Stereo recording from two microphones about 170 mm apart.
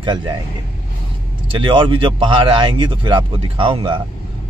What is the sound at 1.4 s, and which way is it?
A man's voice, 30° right (ahead or behind).